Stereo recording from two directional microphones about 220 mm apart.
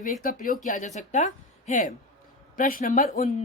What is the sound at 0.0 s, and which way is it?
Speech, 40° left (ahead or behind).